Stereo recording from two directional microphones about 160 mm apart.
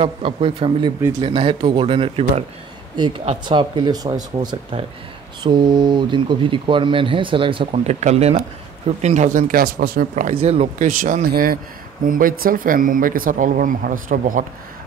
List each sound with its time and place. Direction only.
0.0 s speech: 35° right (ahead or behind); by 10.4 s 60° right (ahead or behind)
10.4 s speech: 40° right (ahead or behind)
10.9 s speech: 55° right (ahead or behind)